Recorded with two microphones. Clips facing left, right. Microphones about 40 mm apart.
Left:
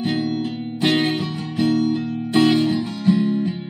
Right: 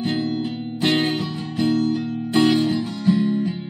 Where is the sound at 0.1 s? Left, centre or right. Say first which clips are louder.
Left 1 dB; centre.